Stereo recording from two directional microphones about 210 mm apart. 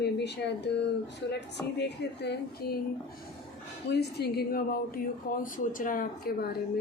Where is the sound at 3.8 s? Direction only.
50° left (ahead or behind).